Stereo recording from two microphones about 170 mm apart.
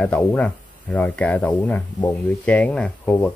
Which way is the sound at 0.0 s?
10° left (ahead or behind).